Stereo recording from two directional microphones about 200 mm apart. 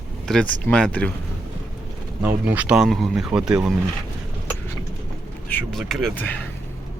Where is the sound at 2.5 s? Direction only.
5° right (ahead or behind).